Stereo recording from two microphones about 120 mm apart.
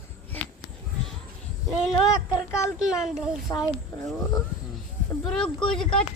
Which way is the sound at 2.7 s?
5° right (ahead or behind).